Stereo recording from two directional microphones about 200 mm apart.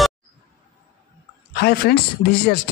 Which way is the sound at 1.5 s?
55° left (ahead or behind).